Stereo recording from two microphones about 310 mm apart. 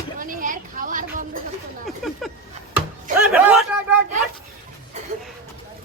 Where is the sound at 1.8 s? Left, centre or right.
Centre.